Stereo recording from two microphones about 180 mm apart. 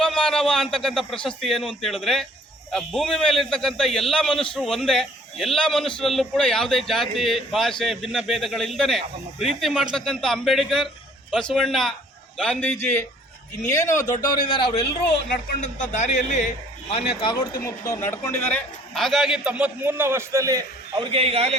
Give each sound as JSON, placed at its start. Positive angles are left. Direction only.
{"t": 0.0, "sound": "a man's voice", "side_deg": 5}
{"t": 15.6, "sound": "a man's voice", "side_deg": 40}
{"t": 17.4, "sound": "a man's voice", "side_deg": 15}